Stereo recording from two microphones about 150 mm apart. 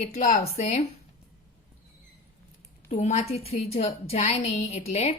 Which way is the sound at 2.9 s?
45° left (ahead or behind).